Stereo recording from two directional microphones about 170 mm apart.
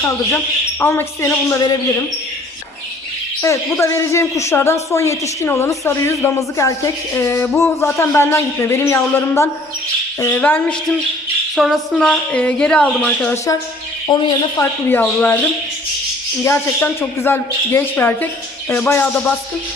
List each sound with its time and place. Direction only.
0.8 s a woman's voice: 15° left (ahead or behind)
3.4 s a woman's voice: 15° left (ahead or behind)
11.5 s a woman's voice: centre (ahead or behind); by 14.2 s 25° left (ahead or behind)
14.6 s a woman's voice: 10° left (ahead or behind)
16.4 s a woman's voice: 15° left (ahead or behind)